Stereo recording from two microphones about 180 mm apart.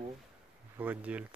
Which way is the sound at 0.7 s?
10° right (ahead or behind).